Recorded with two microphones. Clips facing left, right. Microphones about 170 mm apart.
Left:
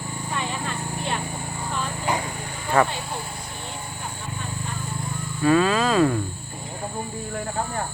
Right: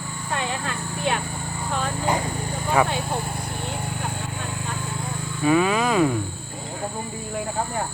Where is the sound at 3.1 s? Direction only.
55° right (ahead or behind).